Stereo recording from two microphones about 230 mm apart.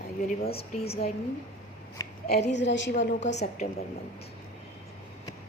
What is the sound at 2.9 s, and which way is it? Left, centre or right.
Speech, left.